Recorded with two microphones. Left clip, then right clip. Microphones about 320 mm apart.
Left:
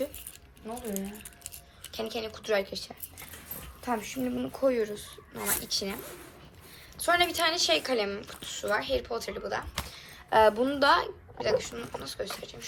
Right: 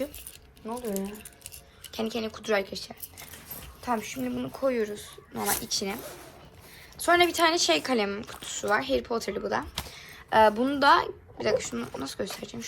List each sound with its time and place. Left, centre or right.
1.9 s a woman's voice: centre